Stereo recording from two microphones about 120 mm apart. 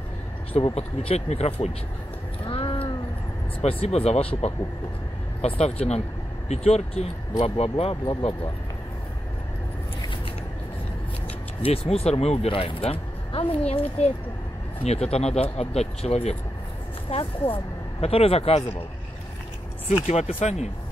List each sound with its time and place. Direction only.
0.5 s speech: 55° left (ahead or behind)
2.4 s a sound: 45° left (ahead or behind)
3.6 s speech: 60° left (ahead or behind)
11.6 s speech: 55° left (ahead or behind)
19.9 s speech: 65° left (ahead or behind)